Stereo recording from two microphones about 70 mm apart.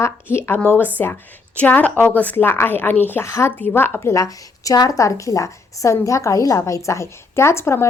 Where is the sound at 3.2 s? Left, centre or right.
Left.